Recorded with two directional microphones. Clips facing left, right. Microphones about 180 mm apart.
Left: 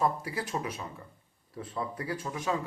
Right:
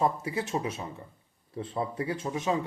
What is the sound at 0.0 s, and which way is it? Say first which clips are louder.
Speech: right 2 dB; 25° right (ahead or behind).